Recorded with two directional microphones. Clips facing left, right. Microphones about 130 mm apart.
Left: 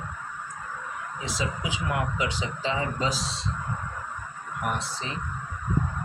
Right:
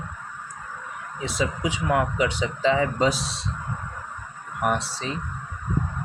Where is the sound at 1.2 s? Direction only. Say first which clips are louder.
Right 6 dB; 60° right (ahead or behind).